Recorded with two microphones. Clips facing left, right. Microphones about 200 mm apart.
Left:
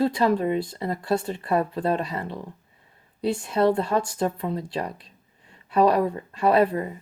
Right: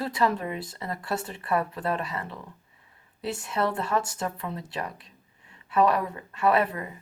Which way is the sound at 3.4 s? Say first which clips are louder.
Left 6 dB; 25° left (ahead or behind).